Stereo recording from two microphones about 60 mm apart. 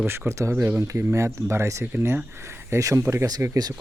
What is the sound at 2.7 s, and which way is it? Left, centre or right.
Speech, right.